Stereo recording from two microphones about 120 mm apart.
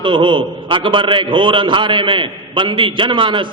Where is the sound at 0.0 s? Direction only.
45° right (ahead or behind).